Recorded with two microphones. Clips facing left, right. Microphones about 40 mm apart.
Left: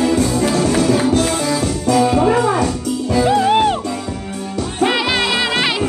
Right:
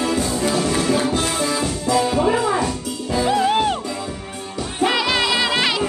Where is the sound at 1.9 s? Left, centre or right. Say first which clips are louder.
Left 4 dB; left.